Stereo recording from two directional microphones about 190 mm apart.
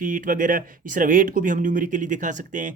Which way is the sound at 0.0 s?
45° right (ahead or behind).